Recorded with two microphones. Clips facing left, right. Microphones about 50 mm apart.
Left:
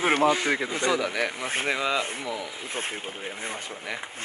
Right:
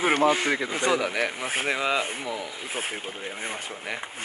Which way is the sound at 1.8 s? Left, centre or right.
Centre.